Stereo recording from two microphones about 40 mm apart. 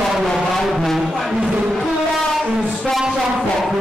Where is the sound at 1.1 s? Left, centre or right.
Centre.